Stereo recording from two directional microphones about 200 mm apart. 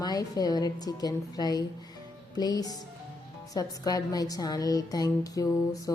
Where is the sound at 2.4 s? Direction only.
20° left (ahead or behind).